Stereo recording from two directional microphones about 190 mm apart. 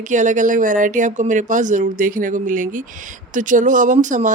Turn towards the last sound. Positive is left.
turn(degrees=-40)  # may be behind; listen again after turning